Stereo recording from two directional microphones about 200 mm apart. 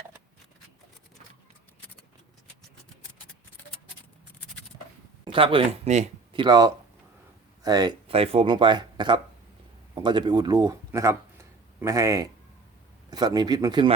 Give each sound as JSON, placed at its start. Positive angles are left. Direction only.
{"t": 5.2, "sound": "speech", "side_deg": -25}
{"t": 6.4, "sound": "speech", "side_deg": -20}